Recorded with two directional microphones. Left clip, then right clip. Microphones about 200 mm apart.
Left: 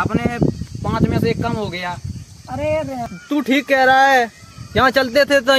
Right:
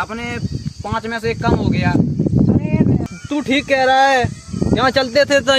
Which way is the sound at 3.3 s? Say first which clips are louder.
Even; centre (ahead or behind).